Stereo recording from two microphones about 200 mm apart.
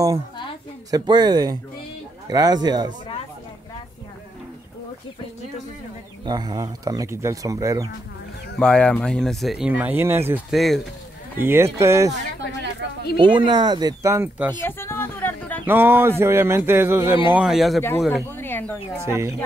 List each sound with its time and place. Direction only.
0.9 s speech: 20° right (ahead or behind)
6.2 s speech: 20° right (ahead or behind)
8.5 s speech: 5° left (ahead or behind); by 10.4 s 10° right (ahead or behind)
10.5 s speech: centre (ahead or behind)
11.3 s speech: 10° right (ahead or behind)
13.2 s speech: 25° right (ahead or behind)
14.6 s a sound: 10° left (ahead or behind)
15.6 s speech: 10° right (ahead or behind)
18.3 s speech: 10° left (ahead or behind)
19.0 s speech: 15° right (ahead or behind)